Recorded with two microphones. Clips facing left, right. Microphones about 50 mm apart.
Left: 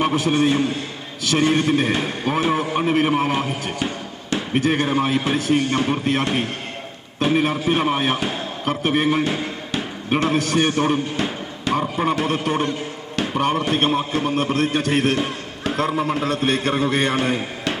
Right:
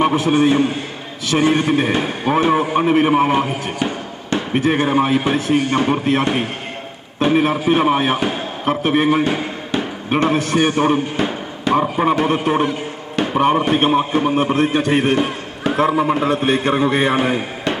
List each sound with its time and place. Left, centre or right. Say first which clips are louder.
0.0 s a man's voice: right 4 dB; centre
13.1 s chop: right 5 dB; centre
13.7 s a man's voice: right 4 dB; centre